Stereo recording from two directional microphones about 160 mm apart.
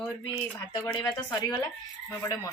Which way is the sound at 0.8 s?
20° left (ahead or behind).